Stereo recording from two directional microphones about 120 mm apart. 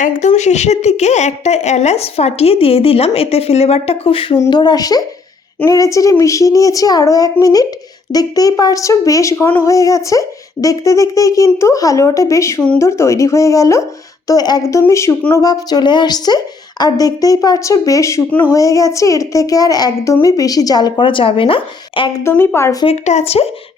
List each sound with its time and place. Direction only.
0.0 s a woman's voice: 75° left (ahead or behind); by 4.4 s 50° left (ahead or behind)
4.4 s a woman's voice: 35° left (ahead or behind)
22.2 s speech: 20° left (ahead or behind)
23.0 s a woman's voice: 65° left (ahead or behind)